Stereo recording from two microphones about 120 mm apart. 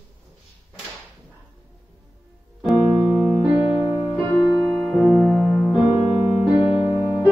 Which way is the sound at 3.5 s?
45° left (ahead or behind).